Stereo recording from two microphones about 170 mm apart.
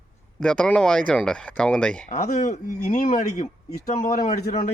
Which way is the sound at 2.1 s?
45° left (ahead or behind).